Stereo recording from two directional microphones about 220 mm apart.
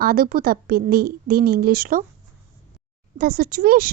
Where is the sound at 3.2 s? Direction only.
40° right (ahead or behind).